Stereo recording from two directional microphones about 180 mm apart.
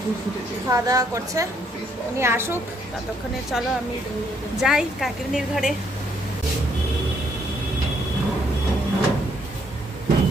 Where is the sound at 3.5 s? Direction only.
Centre (ahead or behind).